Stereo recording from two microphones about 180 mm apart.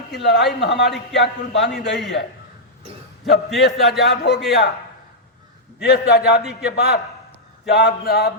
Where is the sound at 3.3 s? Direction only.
65° left (ahead or behind).